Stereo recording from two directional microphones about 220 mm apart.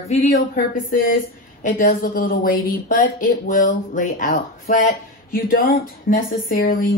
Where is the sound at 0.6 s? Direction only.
40° left (ahead or behind).